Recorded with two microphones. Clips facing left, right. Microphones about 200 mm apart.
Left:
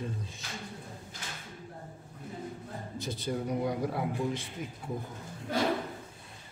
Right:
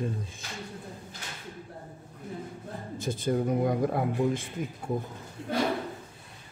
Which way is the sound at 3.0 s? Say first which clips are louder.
Right 6 dB; 50° right (ahead or behind).